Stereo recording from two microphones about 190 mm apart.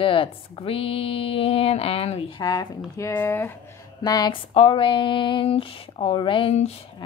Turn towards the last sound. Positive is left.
turn(degrees=30)  # may be behind; listen again after turning